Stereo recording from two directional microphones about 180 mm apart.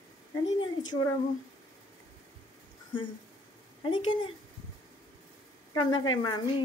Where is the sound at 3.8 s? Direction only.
25° left (ahead or behind).